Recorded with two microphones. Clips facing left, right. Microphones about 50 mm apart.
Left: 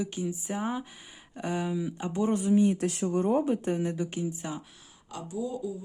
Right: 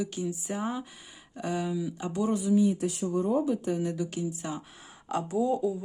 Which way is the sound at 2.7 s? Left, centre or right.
Left.